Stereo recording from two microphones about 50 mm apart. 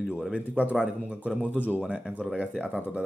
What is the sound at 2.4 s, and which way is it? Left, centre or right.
Speech, left.